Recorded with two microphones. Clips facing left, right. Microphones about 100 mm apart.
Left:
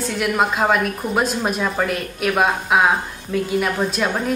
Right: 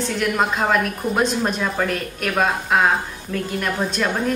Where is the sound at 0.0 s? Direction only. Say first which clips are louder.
Left 1 dB; 5° left (ahead or behind).